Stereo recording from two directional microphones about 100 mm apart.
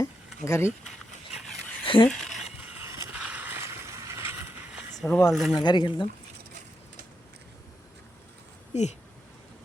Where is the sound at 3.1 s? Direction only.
15° right (ahead or behind).